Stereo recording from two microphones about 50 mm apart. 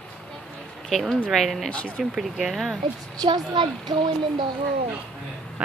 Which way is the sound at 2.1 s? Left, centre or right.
Centre.